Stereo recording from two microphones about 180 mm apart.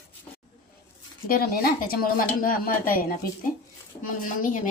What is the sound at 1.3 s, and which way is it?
Speech, 55° left (ahead or behind).